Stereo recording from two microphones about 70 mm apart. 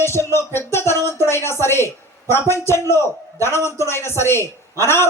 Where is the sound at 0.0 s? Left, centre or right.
Left.